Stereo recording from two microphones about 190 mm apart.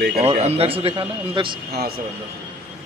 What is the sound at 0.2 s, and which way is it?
A man's voice, 35° right (ahead or behind).